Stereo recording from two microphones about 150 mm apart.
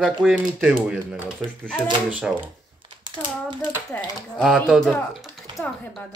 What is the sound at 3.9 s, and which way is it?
Speech, 15° left (ahead or behind).